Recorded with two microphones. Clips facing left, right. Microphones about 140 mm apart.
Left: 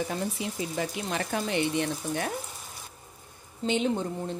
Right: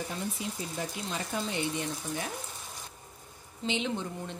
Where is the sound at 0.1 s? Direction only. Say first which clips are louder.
Left 4 dB; 90° left; by 2.3 s 65° left (ahead or behind).